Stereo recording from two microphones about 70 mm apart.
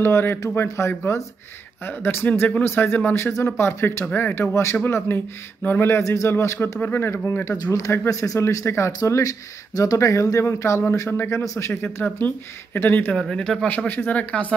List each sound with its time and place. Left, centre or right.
0.0 s speech: left
4.0 s speech: left
6.8 s speech: left
7.5 s speech: left
11.7 s speech: left
13.3 s speech: centre
13.8 s speech: left